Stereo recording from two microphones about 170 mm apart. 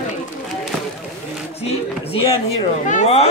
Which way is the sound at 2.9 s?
40° left (ahead or behind).